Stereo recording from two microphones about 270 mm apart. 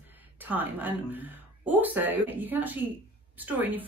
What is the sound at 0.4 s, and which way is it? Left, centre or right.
Speech, centre.